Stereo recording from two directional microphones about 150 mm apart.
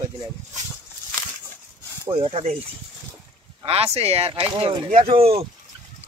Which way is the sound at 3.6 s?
40° right (ahead or behind).